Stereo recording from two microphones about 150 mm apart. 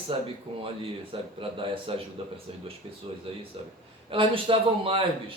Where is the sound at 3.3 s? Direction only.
35° right (ahead or behind).